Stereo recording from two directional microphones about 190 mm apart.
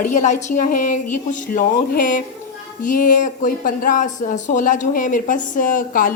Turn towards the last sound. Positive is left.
turn(degrees=45)  # may be behind; listen again after turning